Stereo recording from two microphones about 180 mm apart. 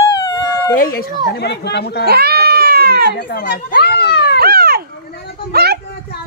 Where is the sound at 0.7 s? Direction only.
55° left (ahead or behind).